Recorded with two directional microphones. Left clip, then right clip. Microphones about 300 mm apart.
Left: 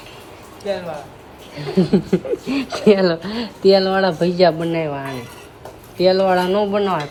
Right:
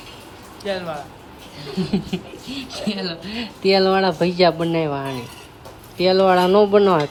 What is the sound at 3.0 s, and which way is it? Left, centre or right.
Speech, centre.